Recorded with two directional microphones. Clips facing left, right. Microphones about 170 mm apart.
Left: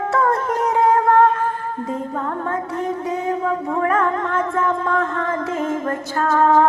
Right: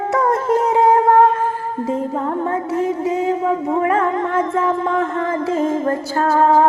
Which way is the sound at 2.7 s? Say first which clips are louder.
Right 5 dB; 25° right (ahead or behind).